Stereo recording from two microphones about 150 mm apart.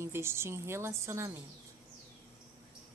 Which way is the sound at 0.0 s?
15° right (ahead or behind).